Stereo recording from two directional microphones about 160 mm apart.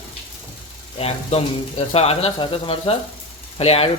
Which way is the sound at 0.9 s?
40° left (ahead or behind).